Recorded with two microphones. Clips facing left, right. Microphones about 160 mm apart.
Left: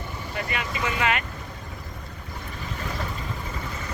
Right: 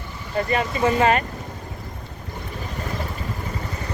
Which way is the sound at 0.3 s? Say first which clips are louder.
Right 9 dB; 35° right (ahead or behind).